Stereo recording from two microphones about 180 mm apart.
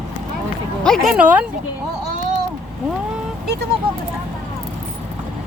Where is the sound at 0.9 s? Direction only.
5° right (ahead or behind).